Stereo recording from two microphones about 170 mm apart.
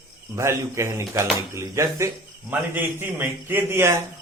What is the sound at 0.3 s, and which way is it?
A man's voice, 15° right (ahead or behind).